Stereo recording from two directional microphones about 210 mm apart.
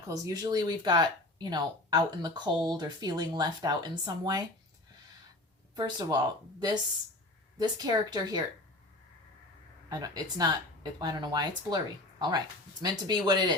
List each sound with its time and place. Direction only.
0.1 s speech: 15° right (ahead or behind)
5.7 s speech: 20° right (ahead or behind)
9.9 s speech: 20° right (ahead or behind)
12.8 s speech: 20° right (ahead or behind)